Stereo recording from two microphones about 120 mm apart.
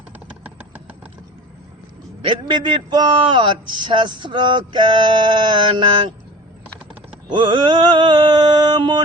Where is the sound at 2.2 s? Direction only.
40° right (ahead or behind).